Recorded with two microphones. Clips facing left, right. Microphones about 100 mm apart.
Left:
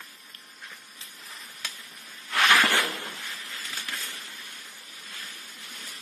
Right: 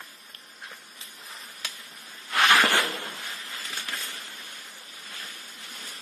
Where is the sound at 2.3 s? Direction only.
25° right (ahead or behind).